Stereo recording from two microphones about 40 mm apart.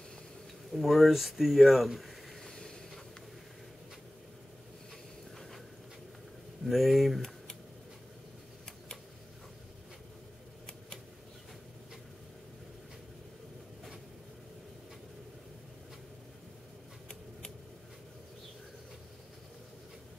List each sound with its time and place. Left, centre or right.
0.7 s speech: centre
2.4 s vehicle: centre
6.6 s speech: centre